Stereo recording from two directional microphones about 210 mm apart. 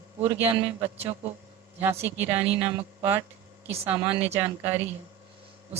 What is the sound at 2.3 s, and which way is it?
Speech, 25° right (ahead or behind).